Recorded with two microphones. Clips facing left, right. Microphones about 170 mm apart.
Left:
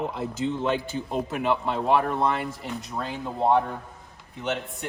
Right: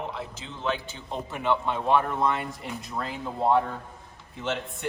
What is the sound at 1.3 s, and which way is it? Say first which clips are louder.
Speech: even; 5° left (ahead or behind).